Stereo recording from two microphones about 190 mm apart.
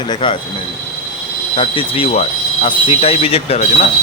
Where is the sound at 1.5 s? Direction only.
30° left (ahead or behind).